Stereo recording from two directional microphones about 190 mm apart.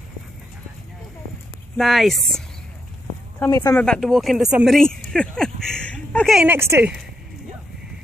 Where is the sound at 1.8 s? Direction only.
Centre (ahead or behind).